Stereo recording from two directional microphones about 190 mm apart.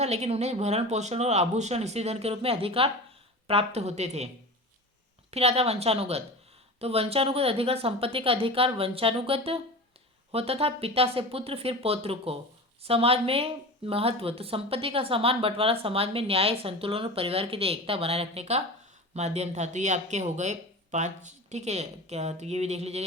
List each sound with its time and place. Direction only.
0.0 s speech: 35° right (ahead or behind)
5.3 s a woman's voice: 35° right (ahead or behind)